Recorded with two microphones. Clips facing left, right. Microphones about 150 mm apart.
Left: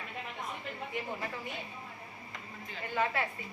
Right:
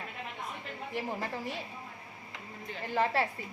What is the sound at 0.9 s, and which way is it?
Speech, 35° right (ahead or behind).